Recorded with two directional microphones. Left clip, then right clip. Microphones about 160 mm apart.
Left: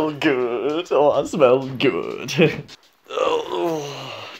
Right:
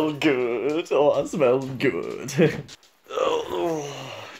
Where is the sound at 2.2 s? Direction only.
10° left (ahead or behind).